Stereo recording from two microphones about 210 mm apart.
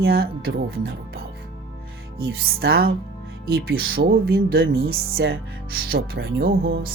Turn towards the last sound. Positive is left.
turn(degrees=-45)  # may be behind; listen again after turning